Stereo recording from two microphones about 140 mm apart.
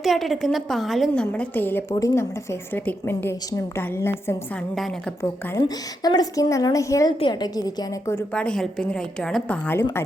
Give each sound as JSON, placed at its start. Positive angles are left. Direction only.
{"t": 0.0, "sound": "a woman's voice", "side_deg": 0}
{"t": 4.7, "sound": "a woman's voice", "side_deg": 0}
{"t": 5.2, "sound": "a woman's voice", "side_deg": 25}
{"t": 8.3, "sound": "a woman's voice", "side_deg": 5}